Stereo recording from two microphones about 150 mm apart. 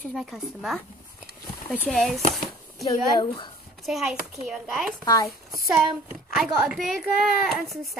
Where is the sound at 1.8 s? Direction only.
Centre (ahead or behind).